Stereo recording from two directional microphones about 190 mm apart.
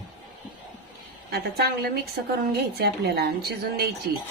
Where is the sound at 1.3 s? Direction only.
60° right (ahead or behind).